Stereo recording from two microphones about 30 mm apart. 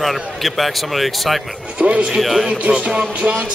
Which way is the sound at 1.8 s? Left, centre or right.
Right.